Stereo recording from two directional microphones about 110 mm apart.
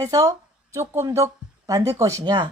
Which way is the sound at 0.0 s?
35° right (ahead or behind).